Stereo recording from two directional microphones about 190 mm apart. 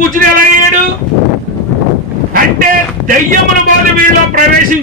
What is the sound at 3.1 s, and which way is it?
A man's voice, 45° right (ahead or behind).